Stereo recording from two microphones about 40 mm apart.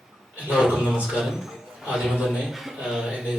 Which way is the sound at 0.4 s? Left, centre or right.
Right.